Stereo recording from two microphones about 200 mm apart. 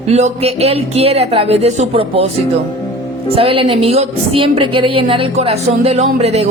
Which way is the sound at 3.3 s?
25° right (ahead or behind).